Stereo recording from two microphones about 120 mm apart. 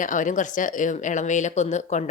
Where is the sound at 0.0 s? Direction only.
90° left.